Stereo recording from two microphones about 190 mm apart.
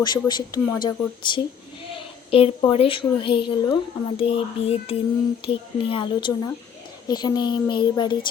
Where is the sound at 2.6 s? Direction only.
30° left (ahead or behind).